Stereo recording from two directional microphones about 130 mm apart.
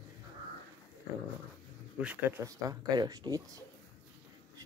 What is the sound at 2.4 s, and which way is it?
Speech, 25° right (ahead or behind).